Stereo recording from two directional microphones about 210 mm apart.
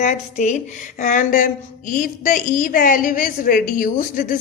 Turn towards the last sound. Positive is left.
turn(degrees=40)  # may be behind; listen again after turning